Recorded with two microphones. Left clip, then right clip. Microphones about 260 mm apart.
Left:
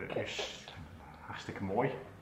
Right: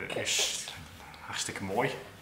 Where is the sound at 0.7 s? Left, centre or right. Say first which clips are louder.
Right 5 dB; centre.